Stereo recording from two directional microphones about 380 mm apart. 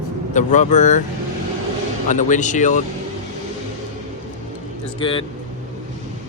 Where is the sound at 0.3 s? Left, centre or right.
Centre.